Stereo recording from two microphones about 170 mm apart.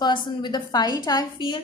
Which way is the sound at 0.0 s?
25° left (ahead or behind).